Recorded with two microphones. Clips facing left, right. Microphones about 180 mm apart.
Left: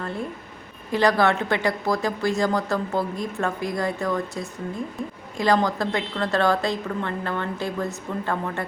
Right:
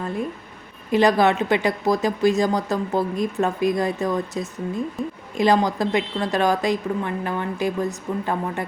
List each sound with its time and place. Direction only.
0.9 s a woman's voice: 20° right (ahead or behind)